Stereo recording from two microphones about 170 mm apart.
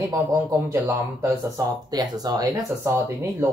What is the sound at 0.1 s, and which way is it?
Speech, 15° right (ahead or behind).